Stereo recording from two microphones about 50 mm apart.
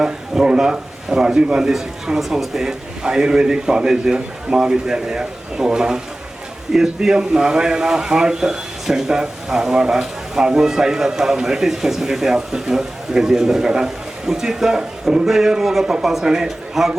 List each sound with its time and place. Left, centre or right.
0.0 s a man's voice: centre